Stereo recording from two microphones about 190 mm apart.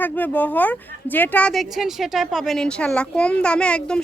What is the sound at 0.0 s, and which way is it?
Speech, 10° left (ahead or behind).